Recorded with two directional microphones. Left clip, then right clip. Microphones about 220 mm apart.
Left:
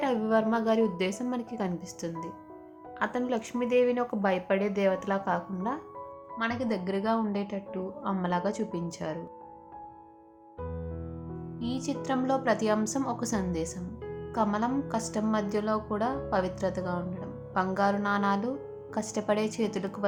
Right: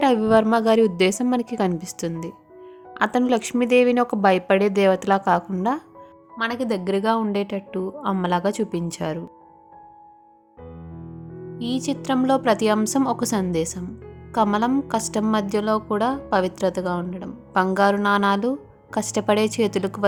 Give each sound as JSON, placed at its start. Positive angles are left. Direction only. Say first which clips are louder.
{"t": 0.0, "sound": "a woman's voice", "louder": "right 9 dB", "side_deg": -40}
{"t": 11.5, "sound": "a woman's voice", "louder": "right 8 dB", "side_deg": -35}